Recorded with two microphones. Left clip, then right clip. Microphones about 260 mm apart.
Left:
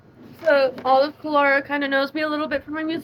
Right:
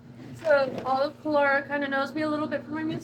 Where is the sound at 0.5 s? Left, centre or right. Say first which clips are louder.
Left 6 dB; left.